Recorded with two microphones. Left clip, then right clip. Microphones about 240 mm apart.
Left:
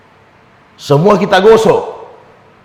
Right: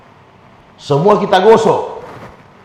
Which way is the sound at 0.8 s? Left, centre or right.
Left.